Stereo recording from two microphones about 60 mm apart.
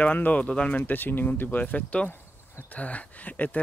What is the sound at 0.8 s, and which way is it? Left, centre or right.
Speech, left.